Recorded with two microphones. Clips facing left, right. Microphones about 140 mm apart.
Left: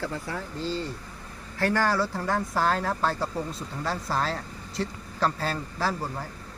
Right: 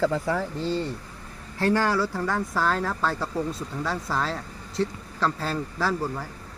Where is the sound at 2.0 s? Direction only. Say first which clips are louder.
Right 1 dB; 15° left (ahead or behind).